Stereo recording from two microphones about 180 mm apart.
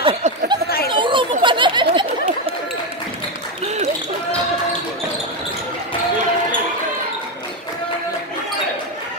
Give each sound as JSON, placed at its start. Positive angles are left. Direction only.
{"t": 0.0, "sound": "chatter", "side_deg": -30}
{"t": 3.6, "sound": "basketball bounce", "side_deg": -40}